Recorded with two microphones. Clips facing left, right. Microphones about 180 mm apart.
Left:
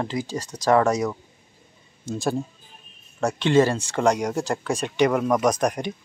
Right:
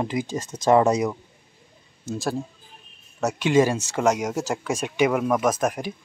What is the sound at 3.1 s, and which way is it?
Speech, 10° right (ahead or behind).